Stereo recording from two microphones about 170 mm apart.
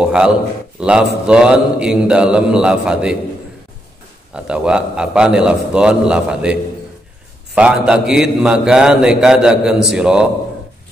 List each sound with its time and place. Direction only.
0.0 s a man's voice: 5° right (ahead or behind)
4.5 s a man's voice: 5° right (ahead or behind)